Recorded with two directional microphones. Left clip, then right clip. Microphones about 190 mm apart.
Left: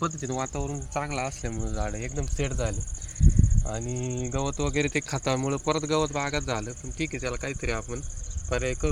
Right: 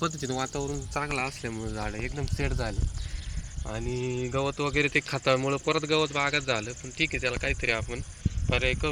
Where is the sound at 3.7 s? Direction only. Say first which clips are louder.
Right 1 dB; 65° left (ahead or behind).